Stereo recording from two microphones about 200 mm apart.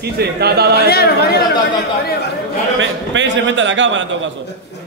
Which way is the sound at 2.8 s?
65° right (ahead or behind).